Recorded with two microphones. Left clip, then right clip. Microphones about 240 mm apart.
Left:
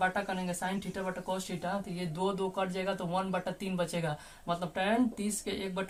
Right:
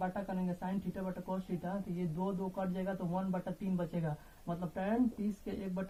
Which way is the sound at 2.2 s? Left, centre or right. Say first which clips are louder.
Left 8 dB; left.